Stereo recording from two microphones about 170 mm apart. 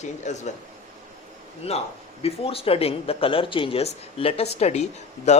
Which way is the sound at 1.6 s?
35° left (ahead or behind).